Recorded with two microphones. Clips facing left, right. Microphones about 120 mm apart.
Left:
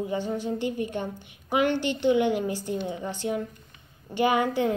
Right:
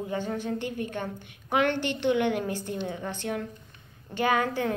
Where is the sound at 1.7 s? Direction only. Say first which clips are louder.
Left 3 dB; 55° right (ahead or behind).